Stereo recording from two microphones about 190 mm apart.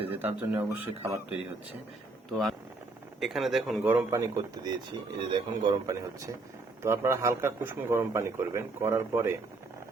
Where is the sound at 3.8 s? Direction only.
15° right (ahead or behind).